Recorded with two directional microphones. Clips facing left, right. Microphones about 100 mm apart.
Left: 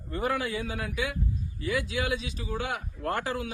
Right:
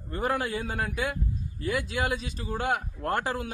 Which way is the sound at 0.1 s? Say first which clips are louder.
Right 1 dB; 45° right (ahead or behind).